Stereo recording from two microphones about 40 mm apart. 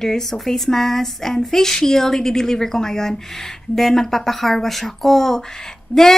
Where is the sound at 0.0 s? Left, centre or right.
Centre.